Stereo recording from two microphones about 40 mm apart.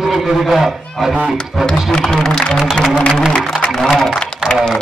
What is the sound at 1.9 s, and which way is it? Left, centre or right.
Speech, centre.